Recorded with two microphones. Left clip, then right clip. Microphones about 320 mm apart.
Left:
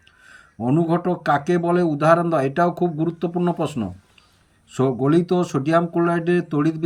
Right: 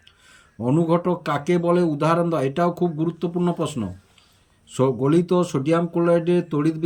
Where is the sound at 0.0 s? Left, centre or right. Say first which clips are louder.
Left 4 dB; centre.